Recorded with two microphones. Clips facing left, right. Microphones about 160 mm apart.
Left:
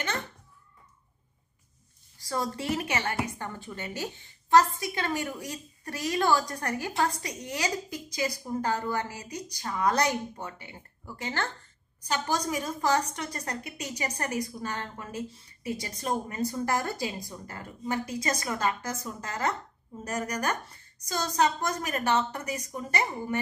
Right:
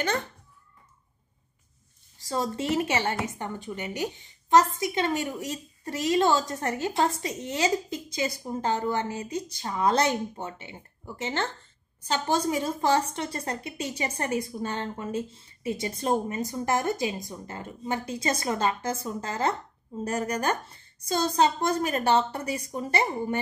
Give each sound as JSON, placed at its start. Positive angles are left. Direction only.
{"t": 2.1, "sound": "a woman's voice", "side_deg": -20}